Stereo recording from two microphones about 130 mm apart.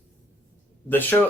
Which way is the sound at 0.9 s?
15° left (ahead or behind).